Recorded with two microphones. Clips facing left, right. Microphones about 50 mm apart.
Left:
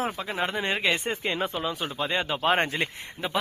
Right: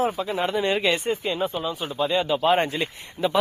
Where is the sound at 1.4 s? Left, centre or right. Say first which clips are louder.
Right 2 dB; left.